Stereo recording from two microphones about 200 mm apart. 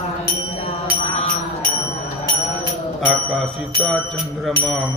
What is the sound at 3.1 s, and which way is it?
Bicycle bell, centre (ahead or behind).